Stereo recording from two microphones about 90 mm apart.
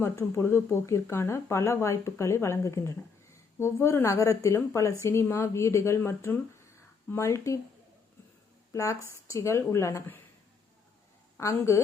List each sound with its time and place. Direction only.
0.0 s speech: 30° left (ahead or behind)
8.7 s speech: 35° left (ahead or behind)
11.3 s speech: 30° left (ahead or behind)